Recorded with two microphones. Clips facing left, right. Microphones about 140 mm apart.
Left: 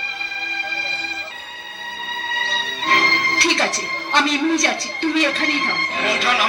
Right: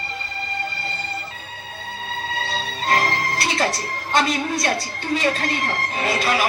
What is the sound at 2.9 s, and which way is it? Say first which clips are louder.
Music: even; 40° right (ahead or behind).